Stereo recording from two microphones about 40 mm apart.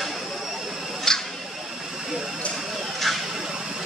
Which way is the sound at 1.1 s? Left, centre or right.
Centre.